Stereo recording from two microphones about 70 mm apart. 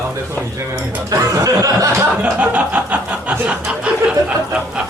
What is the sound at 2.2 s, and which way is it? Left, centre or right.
Chuckle, right.